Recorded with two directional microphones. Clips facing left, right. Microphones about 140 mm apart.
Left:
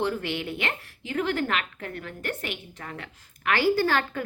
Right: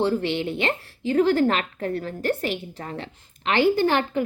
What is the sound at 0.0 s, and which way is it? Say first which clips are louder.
Speech: right 5 dB; 30° right (ahead or behind).